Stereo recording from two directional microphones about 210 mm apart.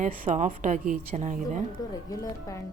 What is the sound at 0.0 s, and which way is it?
Speech, 35° right (ahead or behind).